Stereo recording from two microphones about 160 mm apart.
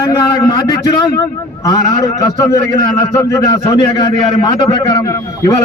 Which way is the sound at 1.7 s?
20° left (ahead or behind).